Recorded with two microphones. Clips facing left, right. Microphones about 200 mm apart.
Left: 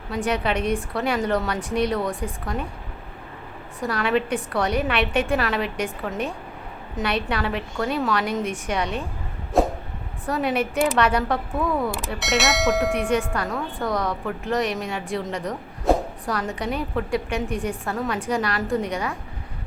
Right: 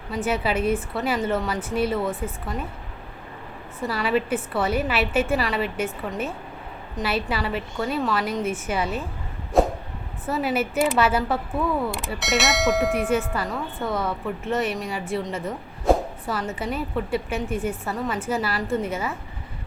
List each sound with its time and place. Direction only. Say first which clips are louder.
0.1 s a woman's voice: even; 5° right (ahead or behind)
3.8 s a woman's voice: left 1 dB; centre (ahead or behind)
9.5 s a sound: right 1 dB; centre (ahead or behind)
10.2 s a woman's voice: left 1 dB; 5° right (ahead or behind)